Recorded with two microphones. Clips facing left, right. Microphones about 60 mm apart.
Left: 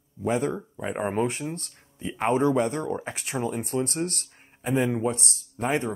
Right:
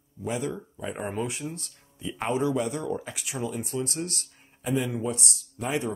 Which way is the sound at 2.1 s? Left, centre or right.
Left.